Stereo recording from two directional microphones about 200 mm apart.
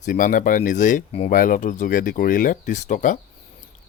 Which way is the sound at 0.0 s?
40° left (ahead or behind).